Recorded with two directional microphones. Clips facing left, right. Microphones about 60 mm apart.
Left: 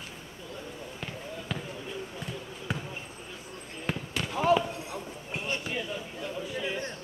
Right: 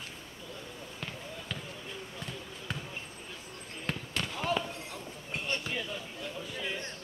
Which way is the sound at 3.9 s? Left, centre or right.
Centre.